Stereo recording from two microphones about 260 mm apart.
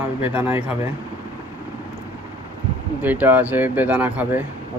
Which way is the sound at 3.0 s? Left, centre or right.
Centre.